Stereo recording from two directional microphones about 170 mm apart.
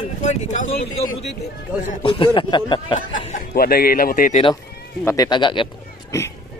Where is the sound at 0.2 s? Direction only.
45° left (ahead or behind).